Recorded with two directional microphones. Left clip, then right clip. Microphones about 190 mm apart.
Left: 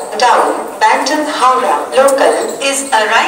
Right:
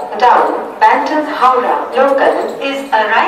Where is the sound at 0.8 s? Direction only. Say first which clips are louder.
Right 1 dB; 65° left (ahead or behind).